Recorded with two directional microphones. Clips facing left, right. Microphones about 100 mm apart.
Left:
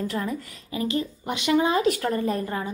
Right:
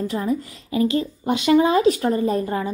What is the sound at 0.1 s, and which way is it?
Speech, 20° right (ahead or behind).